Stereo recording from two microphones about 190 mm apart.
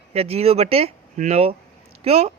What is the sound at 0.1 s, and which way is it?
Speech, 35° right (ahead or behind).